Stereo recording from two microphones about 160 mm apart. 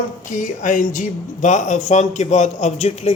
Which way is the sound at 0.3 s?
55° left (ahead or behind).